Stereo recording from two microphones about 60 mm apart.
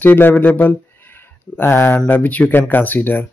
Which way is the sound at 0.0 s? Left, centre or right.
Left.